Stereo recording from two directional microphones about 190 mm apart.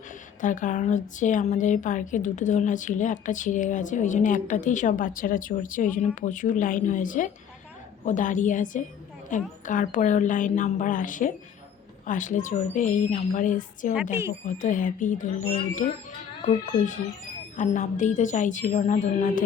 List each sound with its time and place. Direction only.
0.4 s a woman's voice: 40° left (ahead or behind)
17.6 s a woman's voice: 40° left (ahead or behind)